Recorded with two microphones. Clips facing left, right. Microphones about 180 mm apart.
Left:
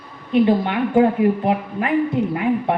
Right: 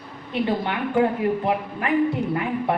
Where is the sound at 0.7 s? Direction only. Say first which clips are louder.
Left 5 dB; 25° left (ahead or behind).